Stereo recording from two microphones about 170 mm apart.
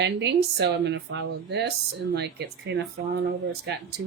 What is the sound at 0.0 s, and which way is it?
Speech, 90° right.